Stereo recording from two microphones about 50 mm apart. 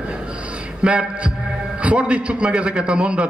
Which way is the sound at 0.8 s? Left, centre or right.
Right.